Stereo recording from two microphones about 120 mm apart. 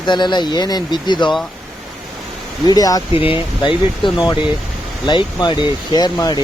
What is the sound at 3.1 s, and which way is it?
Speech, 50° left (ahead or behind).